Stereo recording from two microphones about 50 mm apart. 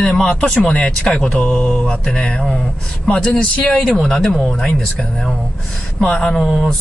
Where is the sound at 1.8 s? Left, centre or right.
Centre.